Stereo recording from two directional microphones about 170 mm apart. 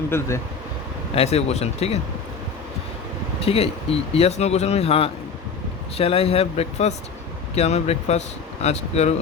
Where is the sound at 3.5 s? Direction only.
35° left (ahead or behind).